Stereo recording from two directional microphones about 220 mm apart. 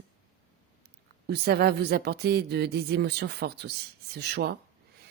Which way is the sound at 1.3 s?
45° right (ahead or behind).